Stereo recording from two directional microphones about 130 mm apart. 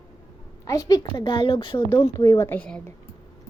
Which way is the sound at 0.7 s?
25° left (ahead or behind).